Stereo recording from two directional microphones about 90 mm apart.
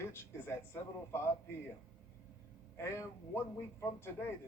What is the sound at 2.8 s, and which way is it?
Speech, 30° left (ahead or behind).